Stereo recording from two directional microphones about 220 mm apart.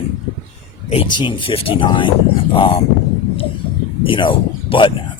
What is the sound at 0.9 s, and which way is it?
Speech, 25° left (ahead or behind).